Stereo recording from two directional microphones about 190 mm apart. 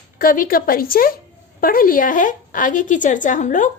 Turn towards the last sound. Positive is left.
turn(degrees=40)  # may be behind; listen again after turning